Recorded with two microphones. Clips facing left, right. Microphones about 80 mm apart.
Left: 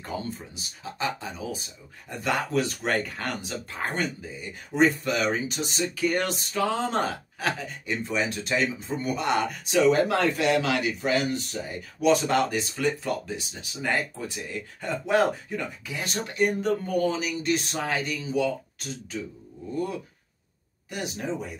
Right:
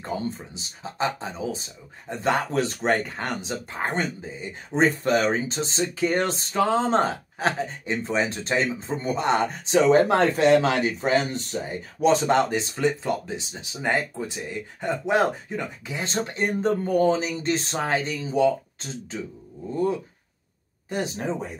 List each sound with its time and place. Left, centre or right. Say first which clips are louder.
0.0 s speech: right 4 dB; right
20.9 s speech: right 4 dB; right